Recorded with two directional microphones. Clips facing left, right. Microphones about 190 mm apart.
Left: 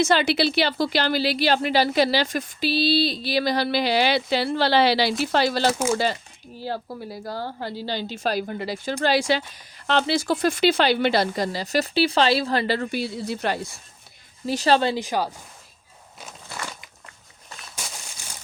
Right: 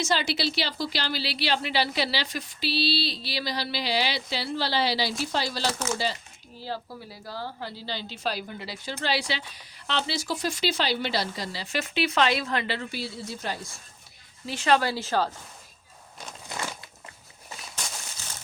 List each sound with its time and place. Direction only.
0.0 s a woman's voice: 60° left (ahead or behind)
6.7 s a woman's voice: 50° left (ahead or behind); by 13.6 s 65° left (ahead or behind)
14.4 s speech: 40° left (ahead or behind)
14.8 s speech: 20° left (ahead or behind)
16.5 s crumpling: 20° right (ahead or behind)